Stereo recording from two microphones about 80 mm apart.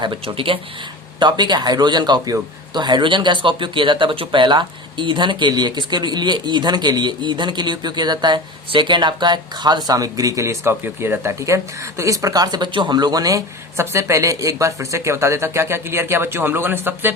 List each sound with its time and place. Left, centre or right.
0.0 s speech: right
1.2 s speech: right